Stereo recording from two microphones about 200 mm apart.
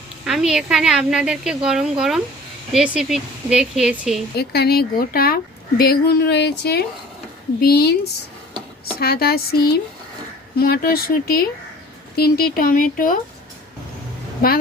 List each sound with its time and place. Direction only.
0.3 s speech: centre (ahead or behind)
4.4 s a woman's voice: 50° left (ahead or behind)
9.0 s a woman's voice: 50° left (ahead or behind)